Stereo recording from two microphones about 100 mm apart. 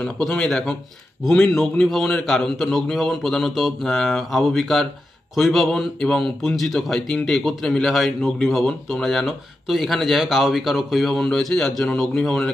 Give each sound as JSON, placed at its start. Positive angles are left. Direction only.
{"t": 0.0, "sound": "speech", "side_deg": 5}